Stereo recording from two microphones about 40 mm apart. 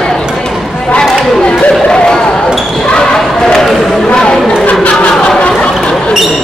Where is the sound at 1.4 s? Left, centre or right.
Left.